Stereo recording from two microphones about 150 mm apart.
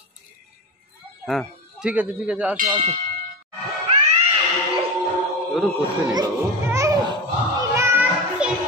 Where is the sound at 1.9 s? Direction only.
10° right (ahead or behind).